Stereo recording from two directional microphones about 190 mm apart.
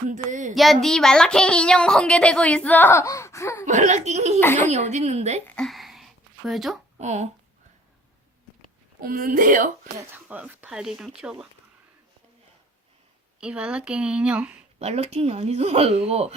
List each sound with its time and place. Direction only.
0.1 s speech: 40° right (ahead or behind)
0.5 s a child's voice: centre (ahead or behind)
3.7 s speech: 40° right (ahead or behind)
4.4 s a woman's voice: 10° left (ahead or behind)
4.7 s speech: 35° right (ahead or behind)
5.5 s a sound: centre (ahead or behind)
7.0 s speech: 35° right (ahead or behind)
9.0 s speech: 45° right (ahead or behind)
10.1 s a child's voice: 5° right (ahead or behind)
13.4 s a child's voice: 5° right (ahead or behind)
14.8 s speech: 35° right (ahead or behind)